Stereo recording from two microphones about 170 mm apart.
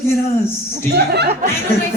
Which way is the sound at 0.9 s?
75° right (ahead or behind).